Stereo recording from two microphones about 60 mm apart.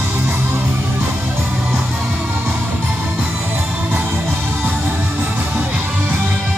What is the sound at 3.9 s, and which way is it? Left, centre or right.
Music, right.